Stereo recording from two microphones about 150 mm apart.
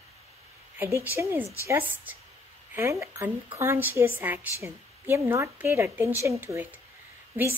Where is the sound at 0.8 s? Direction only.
15° right (ahead or behind).